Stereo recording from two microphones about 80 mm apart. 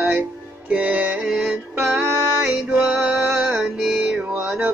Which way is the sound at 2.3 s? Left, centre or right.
Centre.